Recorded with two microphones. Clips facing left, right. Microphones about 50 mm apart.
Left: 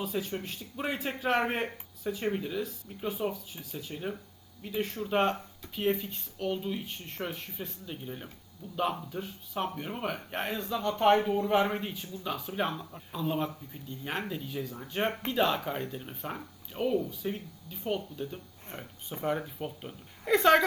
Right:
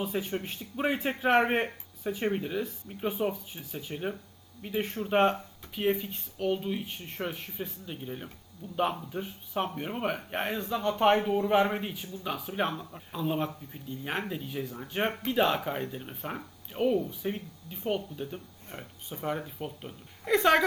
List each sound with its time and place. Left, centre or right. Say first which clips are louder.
0.0 s speech: right 2 dB; right
5.7 s speech: right 1 dB; centre
9.1 s speech: right 2 dB; right
9.7 s speech: right 3 dB; centre
19.2 s speech: left 1 dB; centre